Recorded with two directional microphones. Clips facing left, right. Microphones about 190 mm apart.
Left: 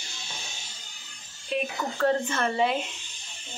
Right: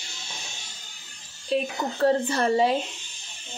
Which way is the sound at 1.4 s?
35° right (ahead or behind).